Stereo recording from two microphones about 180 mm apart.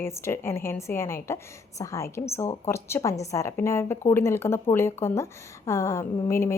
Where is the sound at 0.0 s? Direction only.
15° left (ahead or behind).